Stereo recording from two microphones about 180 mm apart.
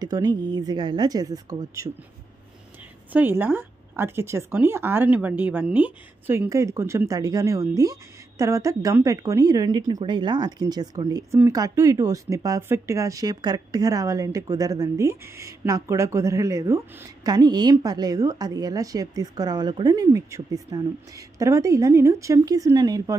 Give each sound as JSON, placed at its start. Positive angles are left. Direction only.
{"t": 0.0, "sound": "speech", "side_deg": -20}
{"t": 3.1, "sound": "speech", "side_deg": -10}